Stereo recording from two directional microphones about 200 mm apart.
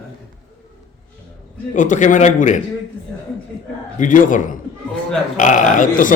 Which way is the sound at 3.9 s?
40° left (ahead or behind).